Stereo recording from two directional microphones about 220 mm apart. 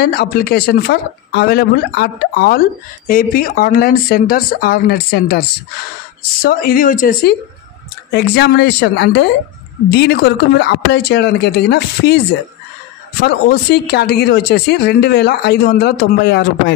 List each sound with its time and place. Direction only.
0.0 s speech: 45° left (ahead or behind)
6.4 s speech: 40° left (ahead or behind)
13.2 s speech: 45° left (ahead or behind)